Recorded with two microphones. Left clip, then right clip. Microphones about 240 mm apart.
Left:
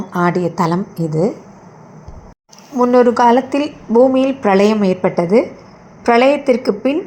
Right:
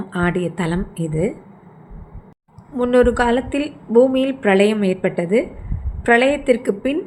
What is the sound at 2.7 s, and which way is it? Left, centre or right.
A woman's voice, centre.